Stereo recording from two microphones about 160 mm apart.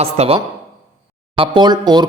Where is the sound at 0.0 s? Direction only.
40° right (ahead or behind).